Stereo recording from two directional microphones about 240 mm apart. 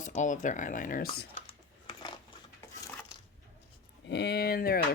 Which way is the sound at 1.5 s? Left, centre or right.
Centre.